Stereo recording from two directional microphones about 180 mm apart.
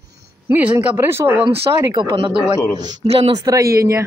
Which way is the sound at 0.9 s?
15° right (ahead or behind).